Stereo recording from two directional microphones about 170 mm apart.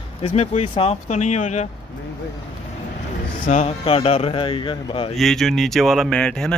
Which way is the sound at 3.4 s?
40° left (ahead or behind).